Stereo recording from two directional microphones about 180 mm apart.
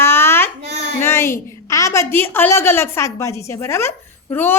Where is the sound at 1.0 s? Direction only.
15° left (ahead or behind).